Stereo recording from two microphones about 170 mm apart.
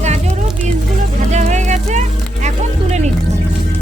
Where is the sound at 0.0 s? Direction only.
40° right (ahead or behind).